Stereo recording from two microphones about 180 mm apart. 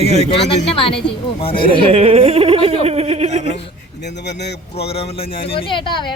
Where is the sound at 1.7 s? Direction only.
30° right (ahead or behind).